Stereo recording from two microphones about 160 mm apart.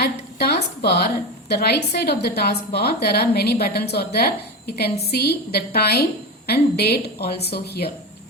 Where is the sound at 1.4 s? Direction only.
90° left.